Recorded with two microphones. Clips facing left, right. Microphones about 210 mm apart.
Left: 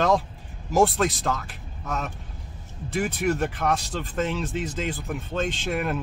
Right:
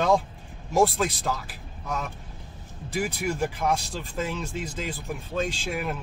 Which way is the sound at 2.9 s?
Centre (ahead or behind).